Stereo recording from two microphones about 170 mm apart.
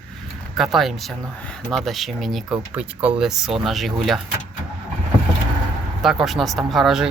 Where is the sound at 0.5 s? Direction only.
Centre (ahead or behind).